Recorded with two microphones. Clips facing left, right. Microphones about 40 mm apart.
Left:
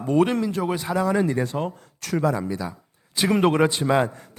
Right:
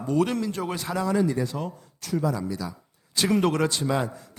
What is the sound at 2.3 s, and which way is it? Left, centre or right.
A man's voice, left.